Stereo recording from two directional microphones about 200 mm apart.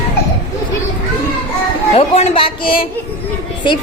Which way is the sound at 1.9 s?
30° left (ahead or behind).